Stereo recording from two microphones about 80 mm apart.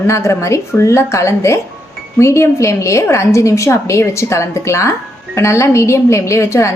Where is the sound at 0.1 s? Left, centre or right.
Left.